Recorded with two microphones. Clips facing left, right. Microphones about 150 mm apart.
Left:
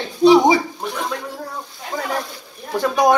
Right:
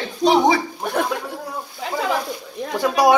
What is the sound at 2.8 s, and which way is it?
Speech, 5° right (ahead or behind).